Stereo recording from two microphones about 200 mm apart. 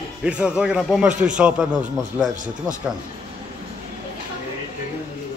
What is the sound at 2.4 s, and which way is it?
Speech, 40° right (ahead or behind).